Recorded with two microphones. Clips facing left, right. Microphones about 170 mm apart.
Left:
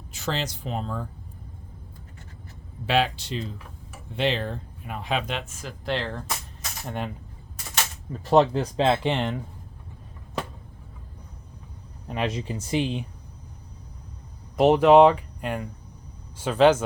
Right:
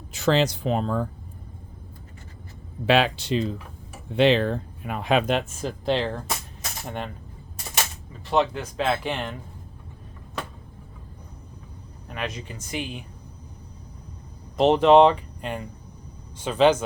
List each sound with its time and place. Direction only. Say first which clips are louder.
0.1 s speech: right 9 dB; 75° right (ahead or behind)
2.8 s speech: right 3 dB; 75° right (ahead or behind)
4.1 s speech: right 7 dB; 90° right; by 5.2 s 70° right (ahead or behind)
5.2 s speech: right 8 dB; 45° right (ahead or behind)
5.5 s speech: right 5 dB; 25° right (ahead or behind)
6.8 s speech: left 1 dB; 5° left (ahead or behind)
8.2 s speech: left 4 dB; 40° left (ahead or behind); by 9.4 s 25° left (ahead or behind)
12.0 s speech: left 5 dB; 30° left (ahead or behind)
14.5 s speech: even; 10° left (ahead or behind)